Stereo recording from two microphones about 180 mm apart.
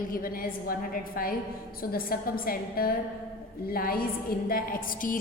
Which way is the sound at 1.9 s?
55° left (ahead or behind).